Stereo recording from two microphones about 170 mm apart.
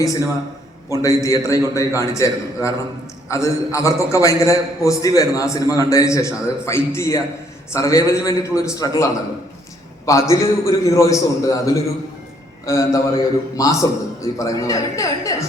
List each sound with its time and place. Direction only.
0.0 s a man's voice: 20° left (ahead or behind)
10.1 s a man's voice: 20° left (ahead or behind)